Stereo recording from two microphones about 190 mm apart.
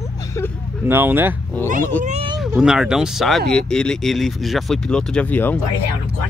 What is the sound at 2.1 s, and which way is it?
Speech, 35° right (ahead or behind).